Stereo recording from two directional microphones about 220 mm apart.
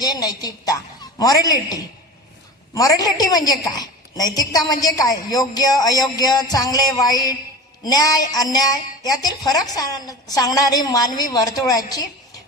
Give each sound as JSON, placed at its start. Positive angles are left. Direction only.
{"t": 0.0, "sound": "a woman's voice", "side_deg": 15}